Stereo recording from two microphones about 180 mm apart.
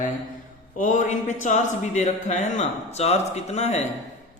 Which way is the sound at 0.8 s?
45° left (ahead or behind).